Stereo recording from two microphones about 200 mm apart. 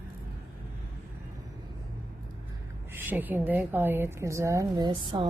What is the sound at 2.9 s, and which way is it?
Speech, 10° right (ahead or behind).